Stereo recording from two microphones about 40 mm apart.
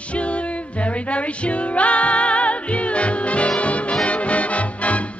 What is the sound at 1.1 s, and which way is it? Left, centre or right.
Music, left.